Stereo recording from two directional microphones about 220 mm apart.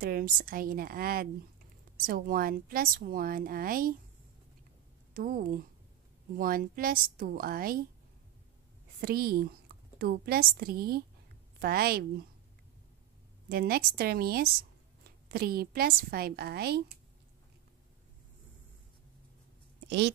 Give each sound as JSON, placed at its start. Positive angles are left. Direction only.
{"t": 0.0, "sound": "a woman's voice", "side_deg": -40}
{"t": 5.1, "sound": "a woman's voice", "side_deg": -40}
{"t": 9.0, "sound": "a woman's voice", "side_deg": -45}
{"t": 13.5, "sound": "a woman's voice", "side_deg": -45}